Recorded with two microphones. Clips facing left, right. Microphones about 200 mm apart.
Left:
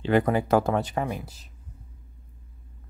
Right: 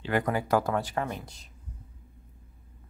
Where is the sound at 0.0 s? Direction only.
25° left (ahead or behind).